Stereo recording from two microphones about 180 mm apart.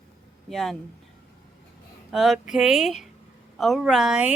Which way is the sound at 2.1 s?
Centre (ahead or behind).